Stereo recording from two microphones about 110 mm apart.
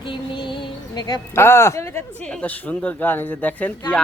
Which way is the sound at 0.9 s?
40° left (ahead or behind).